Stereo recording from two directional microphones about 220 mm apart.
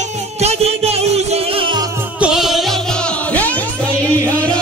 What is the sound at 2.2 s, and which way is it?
Music, centre (ahead or behind).